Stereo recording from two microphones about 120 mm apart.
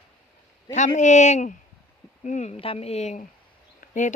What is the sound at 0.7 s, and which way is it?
Speech, 85° left.